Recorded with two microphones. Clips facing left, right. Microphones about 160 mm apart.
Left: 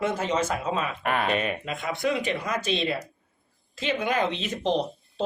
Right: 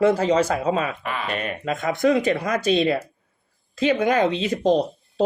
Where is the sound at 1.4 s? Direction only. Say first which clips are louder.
Right 5 dB; 40° right (ahead or behind).